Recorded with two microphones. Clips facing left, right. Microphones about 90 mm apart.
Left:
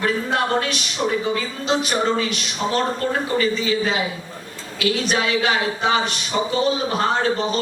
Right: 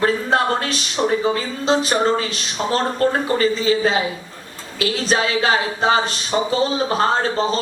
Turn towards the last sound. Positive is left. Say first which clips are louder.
# right 1 dB
turn(degrees=-35)  # may be behind; listen again after turning